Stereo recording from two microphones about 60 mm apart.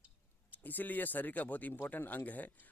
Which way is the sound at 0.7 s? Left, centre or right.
Left.